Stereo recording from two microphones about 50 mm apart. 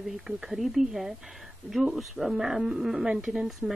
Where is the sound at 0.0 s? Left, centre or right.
Centre.